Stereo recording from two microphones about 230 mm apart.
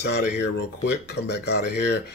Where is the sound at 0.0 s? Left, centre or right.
Left.